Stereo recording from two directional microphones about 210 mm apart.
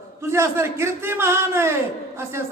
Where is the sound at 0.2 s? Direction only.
10° right (ahead or behind).